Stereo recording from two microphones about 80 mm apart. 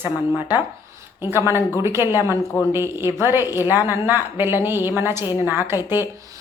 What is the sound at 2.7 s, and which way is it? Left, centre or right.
A woman's voice, right.